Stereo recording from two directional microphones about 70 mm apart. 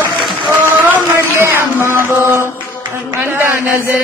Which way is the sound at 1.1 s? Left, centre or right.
Right.